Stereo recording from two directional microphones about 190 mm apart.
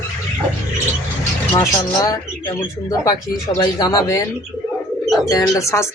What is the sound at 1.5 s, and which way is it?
Speech, 20° left (ahead or behind).